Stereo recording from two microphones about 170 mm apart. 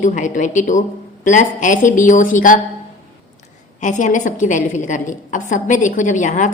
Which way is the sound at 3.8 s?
45° left (ahead or behind).